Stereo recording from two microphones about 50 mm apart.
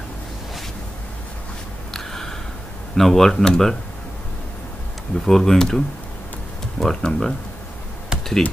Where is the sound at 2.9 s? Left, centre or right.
Centre.